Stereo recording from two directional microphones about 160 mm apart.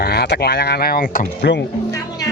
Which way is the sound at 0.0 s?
85° left.